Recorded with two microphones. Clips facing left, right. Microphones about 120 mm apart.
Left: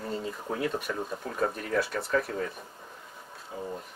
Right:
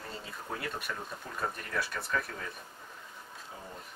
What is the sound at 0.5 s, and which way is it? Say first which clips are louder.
Speech: left 7 dB; centre (ahead or behind).